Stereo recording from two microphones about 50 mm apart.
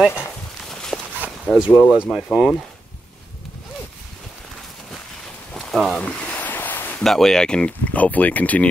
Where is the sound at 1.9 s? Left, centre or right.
Centre.